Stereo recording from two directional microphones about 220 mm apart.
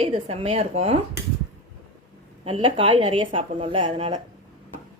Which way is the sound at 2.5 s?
25° right (ahead or behind).